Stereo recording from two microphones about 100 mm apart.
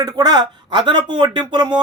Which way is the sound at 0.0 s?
40° right (ahead or behind).